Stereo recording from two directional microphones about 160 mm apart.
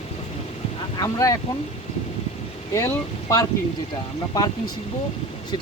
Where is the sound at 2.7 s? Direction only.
20° left (ahead or behind).